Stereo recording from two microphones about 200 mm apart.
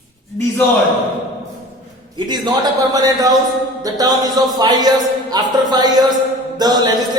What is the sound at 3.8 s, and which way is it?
Speech, 20° right (ahead or behind).